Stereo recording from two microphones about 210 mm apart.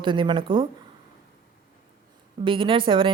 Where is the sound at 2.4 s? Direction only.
25° right (ahead or behind).